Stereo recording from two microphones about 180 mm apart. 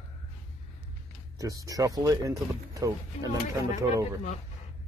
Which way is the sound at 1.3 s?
20° right (ahead or behind).